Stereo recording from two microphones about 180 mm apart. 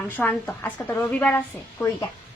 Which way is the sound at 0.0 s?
10° left (ahead or behind).